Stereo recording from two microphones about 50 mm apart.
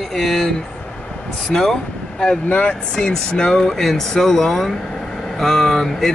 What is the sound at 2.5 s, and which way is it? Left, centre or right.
Speech, left.